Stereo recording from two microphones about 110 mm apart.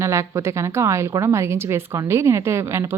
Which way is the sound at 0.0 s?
25° right (ahead or behind).